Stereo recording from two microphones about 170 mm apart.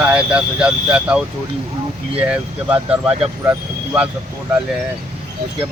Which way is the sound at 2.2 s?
5° right (ahead or behind).